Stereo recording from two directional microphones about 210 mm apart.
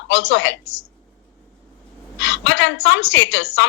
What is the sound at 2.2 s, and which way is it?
A man's voice, 60° left (ahead or behind).